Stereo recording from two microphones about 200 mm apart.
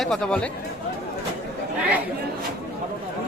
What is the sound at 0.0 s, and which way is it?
Speech, centre (ahead or behind).